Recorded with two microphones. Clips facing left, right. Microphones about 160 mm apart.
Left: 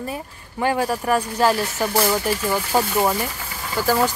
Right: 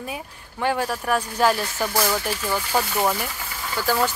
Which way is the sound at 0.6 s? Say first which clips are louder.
Left 3 dB; 5° left (ahead or behind).